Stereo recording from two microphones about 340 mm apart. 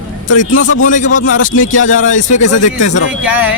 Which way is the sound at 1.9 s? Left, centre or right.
Left.